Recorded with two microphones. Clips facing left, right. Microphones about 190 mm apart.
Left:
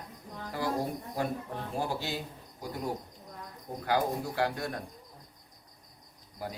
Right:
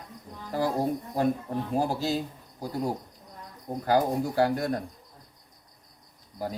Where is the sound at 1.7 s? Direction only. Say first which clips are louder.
Right 6 dB; 40° right (ahead or behind).